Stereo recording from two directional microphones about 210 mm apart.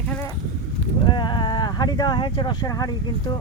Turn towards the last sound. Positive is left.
turn(degrees=15)  # may be behind; listen again after turning